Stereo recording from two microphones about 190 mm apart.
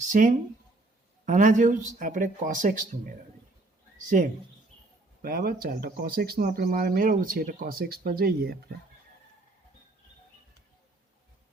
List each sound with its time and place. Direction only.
0.0 s speech: 45° right (ahead or behind)
5.2 s speech: 50° right (ahead or behind)